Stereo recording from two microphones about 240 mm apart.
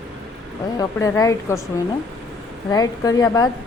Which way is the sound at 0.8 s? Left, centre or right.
Centre.